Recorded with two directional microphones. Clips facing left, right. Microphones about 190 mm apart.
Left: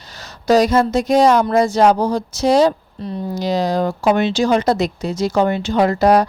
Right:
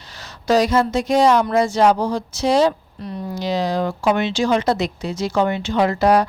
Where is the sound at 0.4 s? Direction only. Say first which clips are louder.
Left 3 dB; 40° left (ahead or behind).